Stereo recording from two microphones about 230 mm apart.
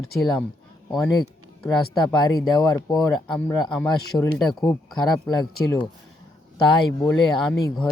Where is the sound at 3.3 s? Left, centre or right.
Centre.